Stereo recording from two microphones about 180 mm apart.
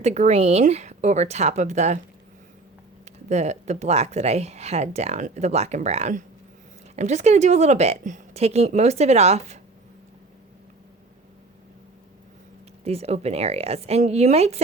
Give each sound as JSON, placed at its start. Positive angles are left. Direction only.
{"t": 0.0, "sound": "speech", "side_deg": -40}
{"t": 3.2, "sound": "speech", "side_deg": -40}
{"t": 12.8, "sound": "speech", "side_deg": -35}